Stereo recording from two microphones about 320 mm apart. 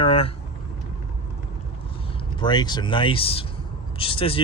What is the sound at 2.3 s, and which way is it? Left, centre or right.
Speech, centre.